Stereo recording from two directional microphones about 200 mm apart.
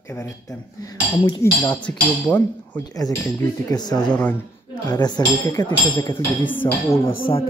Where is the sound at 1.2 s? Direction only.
20° left (ahead or behind).